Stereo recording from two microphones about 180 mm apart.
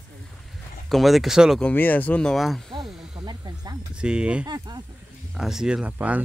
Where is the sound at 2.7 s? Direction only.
25° right (ahead or behind).